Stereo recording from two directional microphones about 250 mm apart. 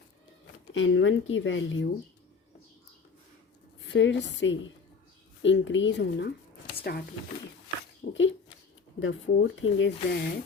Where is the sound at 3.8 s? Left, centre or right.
Left.